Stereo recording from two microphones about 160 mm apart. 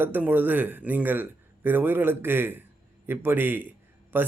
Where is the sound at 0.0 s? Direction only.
10° right (ahead or behind).